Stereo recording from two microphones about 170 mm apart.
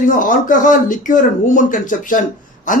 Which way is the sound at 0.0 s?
50° left (ahead or behind).